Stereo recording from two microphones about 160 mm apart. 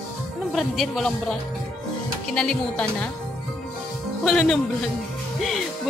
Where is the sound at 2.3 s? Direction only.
5° left (ahead or behind).